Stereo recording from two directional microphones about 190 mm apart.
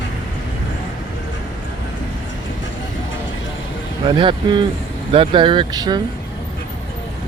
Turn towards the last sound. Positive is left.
turn(degrees=-20)  # may be behind; listen again after turning